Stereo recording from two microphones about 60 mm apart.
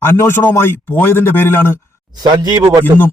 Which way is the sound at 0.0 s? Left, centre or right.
Left.